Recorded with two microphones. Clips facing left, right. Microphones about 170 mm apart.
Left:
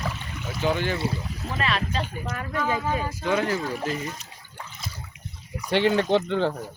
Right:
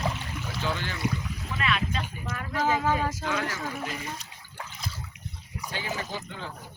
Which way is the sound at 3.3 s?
30° left (ahead or behind).